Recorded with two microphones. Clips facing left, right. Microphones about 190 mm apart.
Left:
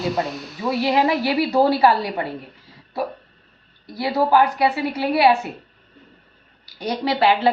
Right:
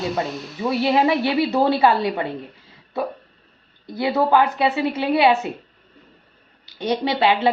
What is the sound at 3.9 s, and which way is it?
A woman's voice, 25° right (ahead or behind).